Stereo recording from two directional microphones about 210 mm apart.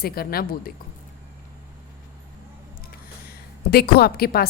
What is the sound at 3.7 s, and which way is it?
Speech, 45° left (ahead or behind).